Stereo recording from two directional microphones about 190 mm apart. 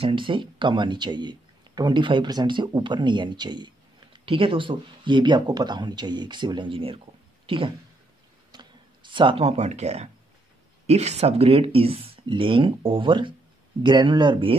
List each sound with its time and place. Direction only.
0.0 s speech: 25° right (ahead or behind)
8.5 s a sound: 25° right (ahead or behind)
10.9 s speech: 35° right (ahead or behind)